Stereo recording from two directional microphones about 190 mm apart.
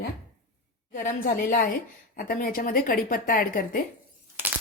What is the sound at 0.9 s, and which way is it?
A woman's voice, 45° left (ahead or behind).